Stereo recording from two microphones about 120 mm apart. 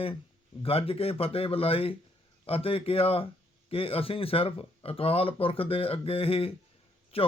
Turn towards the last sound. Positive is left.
turn(degrees=50)  # may be behind; listen again after turning